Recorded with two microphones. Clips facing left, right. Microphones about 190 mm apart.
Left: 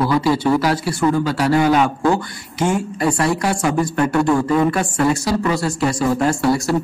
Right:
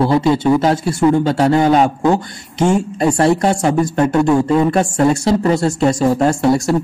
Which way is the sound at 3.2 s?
25° right (ahead or behind).